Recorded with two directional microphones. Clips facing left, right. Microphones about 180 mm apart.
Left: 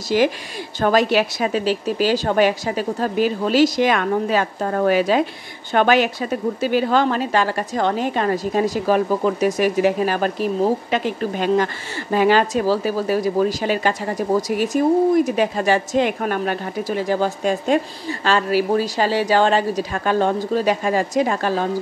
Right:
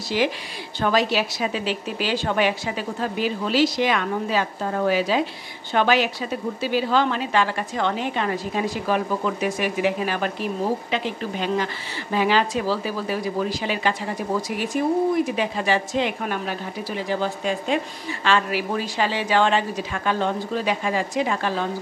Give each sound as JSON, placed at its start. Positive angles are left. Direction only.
{"t": 0.1, "sound": "a woman's voice", "side_deg": 45}